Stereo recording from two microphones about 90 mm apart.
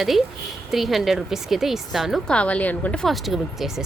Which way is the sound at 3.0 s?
Centre (ahead or behind).